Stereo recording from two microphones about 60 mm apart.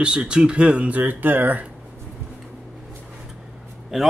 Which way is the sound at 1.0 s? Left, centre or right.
Right.